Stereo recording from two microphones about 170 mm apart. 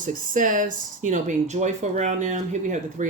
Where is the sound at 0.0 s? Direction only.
50° right (ahead or behind).